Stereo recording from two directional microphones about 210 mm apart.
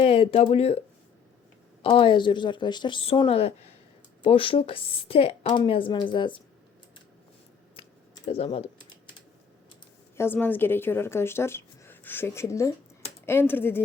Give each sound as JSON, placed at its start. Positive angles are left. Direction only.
{"t": 0.0, "sound": "speech", "side_deg": 30}
{"t": 1.8, "sound": "speech", "side_deg": 25}
{"t": 7.8, "sound": "computer keyboard", "side_deg": 25}
{"t": 10.2, "sound": "a woman's voice", "side_deg": 10}